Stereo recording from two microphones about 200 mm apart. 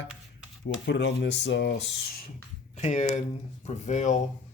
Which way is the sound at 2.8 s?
35° left (ahead or behind).